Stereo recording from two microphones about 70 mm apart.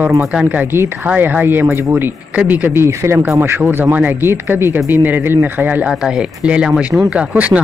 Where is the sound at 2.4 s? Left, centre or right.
Right.